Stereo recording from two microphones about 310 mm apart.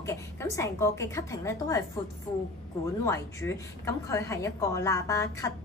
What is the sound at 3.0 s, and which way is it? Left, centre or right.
A woman's voice, centre.